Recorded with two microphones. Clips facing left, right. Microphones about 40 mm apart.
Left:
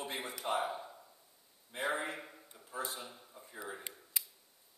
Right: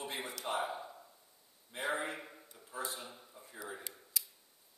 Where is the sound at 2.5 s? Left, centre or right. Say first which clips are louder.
Left 1 dB; centre.